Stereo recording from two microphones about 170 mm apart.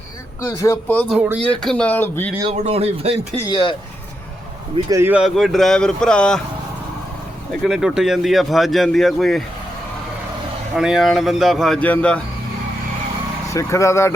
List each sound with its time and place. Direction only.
0.4 s speech: 15° left (ahead or behind)
1.1 s speech: 10° right (ahead or behind)
1.5 s speech: 5° left (ahead or behind)
2.4 s speech: 35° right (ahead or behind)
3.5 s speech: 30° left (ahead or behind)
4.9 s speech: 15° right (ahead or behind); by 6.4 s 5° left (ahead or behind)
7.6 s speech: centre (ahead or behind)
10.8 s speech: 5° right (ahead or behind)
13.5 s speech: 20° left (ahead or behind)